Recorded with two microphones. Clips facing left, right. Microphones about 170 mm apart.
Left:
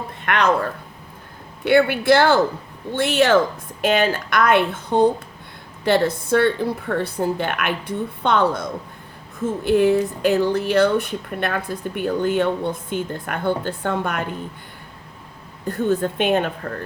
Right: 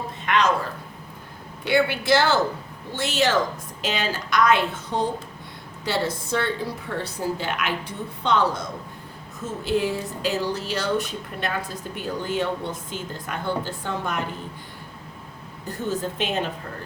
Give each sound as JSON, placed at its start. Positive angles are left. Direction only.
{"t": 0.3, "sound": "speech", "side_deg": 60}
{"t": 15.6, "sound": "speech", "side_deg": 55}